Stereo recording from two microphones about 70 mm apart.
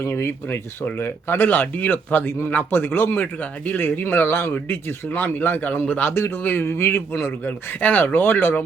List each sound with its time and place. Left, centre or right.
0.0 s speech: left